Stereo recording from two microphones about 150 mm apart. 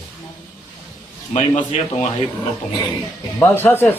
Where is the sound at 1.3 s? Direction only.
40° left (ahead or behind).